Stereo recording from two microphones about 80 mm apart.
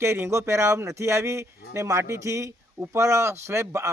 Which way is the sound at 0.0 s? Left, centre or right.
Right.